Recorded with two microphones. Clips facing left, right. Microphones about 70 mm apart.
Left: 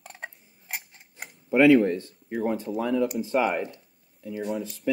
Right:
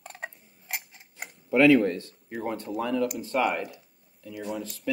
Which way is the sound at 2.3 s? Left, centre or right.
Centre.